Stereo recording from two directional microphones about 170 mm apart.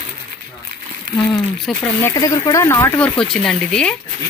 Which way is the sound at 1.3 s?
5° left (ahead or behind).